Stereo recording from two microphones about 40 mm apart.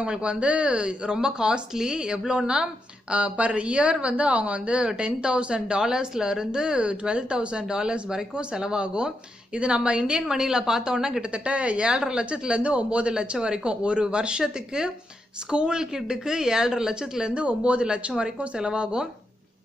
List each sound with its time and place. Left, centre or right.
0.0 s a woman's voice: right
17.3 s speech: right